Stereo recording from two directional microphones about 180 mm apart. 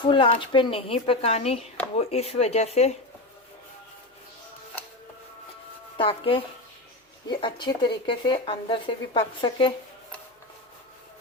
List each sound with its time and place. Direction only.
0.0 s a woman's voice: 30° left (ahead or behind)
6.0 s a woman's voice: 30° left (ahead or behind)
7.4 s speech: 25° left (ahead or behind)